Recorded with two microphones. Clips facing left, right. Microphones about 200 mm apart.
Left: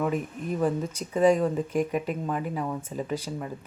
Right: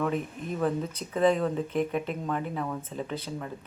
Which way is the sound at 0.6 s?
10° left (ahead or behind).